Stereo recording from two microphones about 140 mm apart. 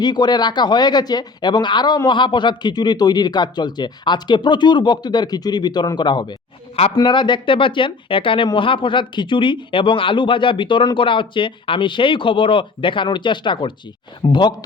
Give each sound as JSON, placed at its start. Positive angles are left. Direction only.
{"t": 0.0, "sound": "speech", "side_deg": 30}